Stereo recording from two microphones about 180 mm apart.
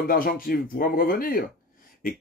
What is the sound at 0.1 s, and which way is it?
Speech, 55° left (ahead or behind).